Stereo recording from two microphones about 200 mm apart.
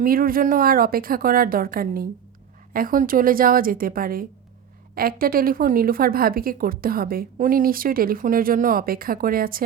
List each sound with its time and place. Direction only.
0.0 s speech: 45° right (ahead or behind)